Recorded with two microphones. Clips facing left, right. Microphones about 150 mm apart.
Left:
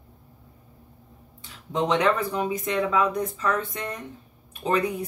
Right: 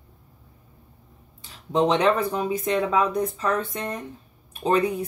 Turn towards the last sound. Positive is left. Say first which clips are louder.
# right 3 dB
turn(degrees=-35)  # may be behind; listen again after turning